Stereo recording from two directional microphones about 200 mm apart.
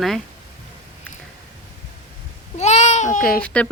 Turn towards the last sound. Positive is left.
turn(degrees=5)  # may be behind; listen again after turning